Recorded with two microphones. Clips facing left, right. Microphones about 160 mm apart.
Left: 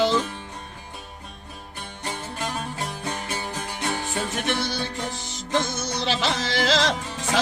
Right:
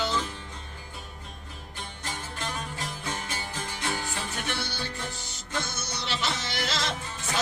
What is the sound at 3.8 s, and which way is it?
Music, 85° left.